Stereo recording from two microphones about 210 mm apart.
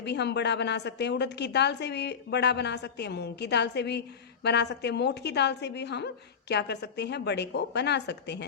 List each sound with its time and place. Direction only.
0.0 s a woman's voice: 55° left (ahead or behind)